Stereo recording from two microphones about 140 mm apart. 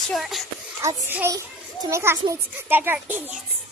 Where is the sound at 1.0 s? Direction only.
15° right (ahead or behind).